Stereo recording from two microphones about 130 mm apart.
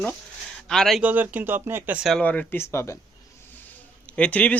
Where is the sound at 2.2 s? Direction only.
10° left (ahead or behind).